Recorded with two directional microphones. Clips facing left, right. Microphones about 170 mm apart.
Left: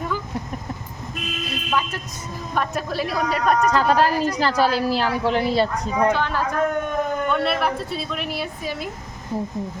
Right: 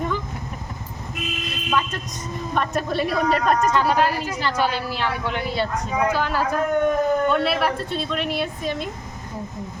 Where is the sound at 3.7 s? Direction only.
35° left (ahead or behind).